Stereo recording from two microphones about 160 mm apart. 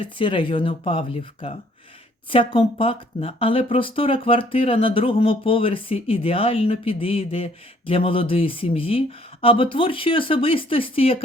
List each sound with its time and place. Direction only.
0.0 s speech: 35° left (ahead or behind)